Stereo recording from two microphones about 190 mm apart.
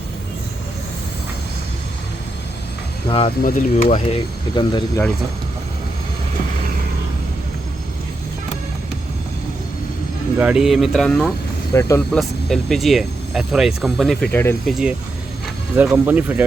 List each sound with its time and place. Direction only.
3.1 s speech: 30° left (ahead or behind)
10.3 s speech: 5° right (ahead or behind)
11.7 s speech: 15° left (ahead or behind)
12.1 s speech: centre (ahead or behind)
14.6 s speech: centre (ahead or behind)